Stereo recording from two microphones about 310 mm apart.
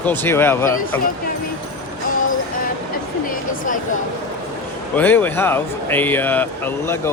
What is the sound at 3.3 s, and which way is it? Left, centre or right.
Speech, left.